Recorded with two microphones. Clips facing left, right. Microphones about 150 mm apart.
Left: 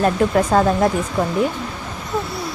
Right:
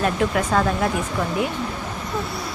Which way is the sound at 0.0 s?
35° left (ahead or behind).